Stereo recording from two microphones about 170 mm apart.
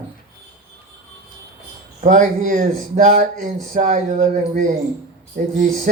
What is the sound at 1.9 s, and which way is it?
Speech, 45° right (ahead or behind).